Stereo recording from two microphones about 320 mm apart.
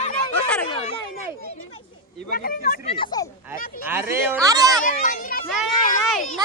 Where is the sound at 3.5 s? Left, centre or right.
Left.